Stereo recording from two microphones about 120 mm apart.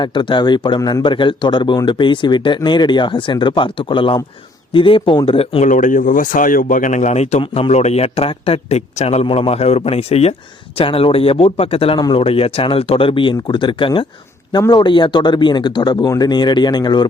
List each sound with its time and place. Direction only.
0.0 s speech: 40° left (ahead or behind)
0.8 s a man's voice: 25° left (ahead or behind)
1.0 s speech: 45° left (ahead or behind)
5.6 s a man's voice: 90° left; by 9.2 s 60° left (ahead or behind)
9.2 s a man's voice: 50° left (ahead or behind)